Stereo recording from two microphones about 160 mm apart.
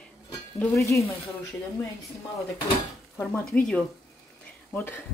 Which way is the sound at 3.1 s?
10° left (ahead or behind).